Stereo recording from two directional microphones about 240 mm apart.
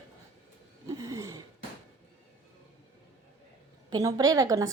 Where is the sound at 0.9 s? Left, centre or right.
Centre.